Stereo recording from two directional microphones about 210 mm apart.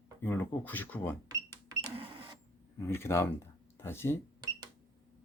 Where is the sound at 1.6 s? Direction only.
25° right (ahead or behind).